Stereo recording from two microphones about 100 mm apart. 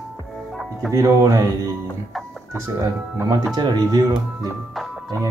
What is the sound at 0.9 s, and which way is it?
Speech, 30° right (ahead or behind).